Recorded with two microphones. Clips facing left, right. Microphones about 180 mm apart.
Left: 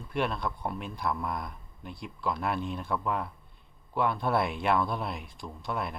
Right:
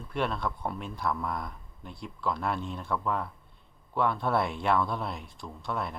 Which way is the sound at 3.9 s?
10° left (ahead or behind).